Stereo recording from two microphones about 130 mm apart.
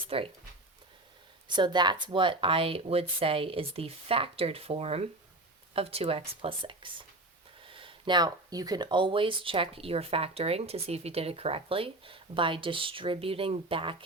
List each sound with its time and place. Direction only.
0.1 s speech: 45° right (ahead or behind)
1.5 s speech: 35° right (ahead or behind)